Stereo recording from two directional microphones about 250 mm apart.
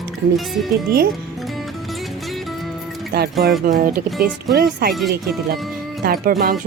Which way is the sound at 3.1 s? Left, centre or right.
Right.